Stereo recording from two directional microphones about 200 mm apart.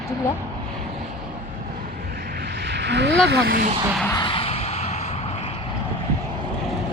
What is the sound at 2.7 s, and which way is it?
Speech, 60° right (ahead or behind).